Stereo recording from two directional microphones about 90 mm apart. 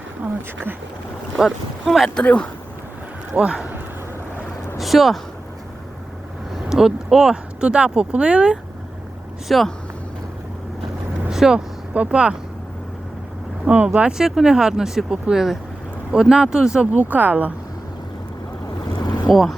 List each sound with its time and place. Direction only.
1.4 s speech: 5° right (ahead or behind)
2.2 s speech: 15° left (ahead or behind)
3.3 s speech: 10° right (ahead or behind)
4.8 s speech: centre (ahead or behind)
6.7 s speech: 5° right (ahead or behind)
9.5 s speech: centre (ahead or behind)
11.3 s speech: 5° right (ahead or behind)
13.7 s speech: 15° right (ahead or behind)
18.9 s vehicle: 50° left (ahead or behind)
19.3 s speech: centre (ahead or behind)